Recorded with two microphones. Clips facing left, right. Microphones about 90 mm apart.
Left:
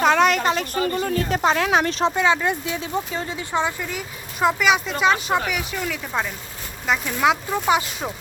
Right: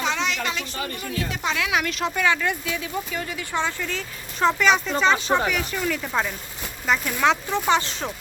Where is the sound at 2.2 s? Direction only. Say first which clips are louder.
Left 3 dB; 20° left (ahead or behind).